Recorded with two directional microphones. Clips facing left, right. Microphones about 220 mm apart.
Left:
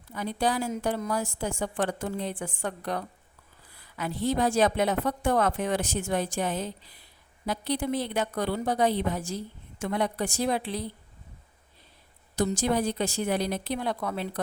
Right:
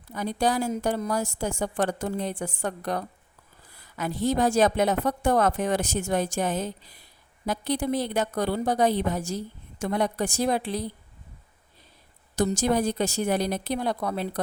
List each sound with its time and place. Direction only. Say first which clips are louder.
0.1 s a woman's voice: right 2 dB; 40° right (ahead or behind)
12.4 s a woman's voice: right 2 dB; 45° right (ahead or behind)